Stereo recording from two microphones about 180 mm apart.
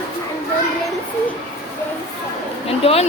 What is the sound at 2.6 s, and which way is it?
Speech, 35° left (ahead or behind).